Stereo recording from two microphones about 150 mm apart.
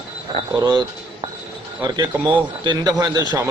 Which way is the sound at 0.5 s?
25° right (ahead or behind).